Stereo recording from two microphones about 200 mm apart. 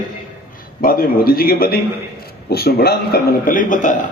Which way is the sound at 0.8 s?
45° left (ahead or behind).